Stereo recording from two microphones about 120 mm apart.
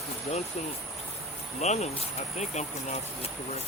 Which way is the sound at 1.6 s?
65° left (ahead or behind).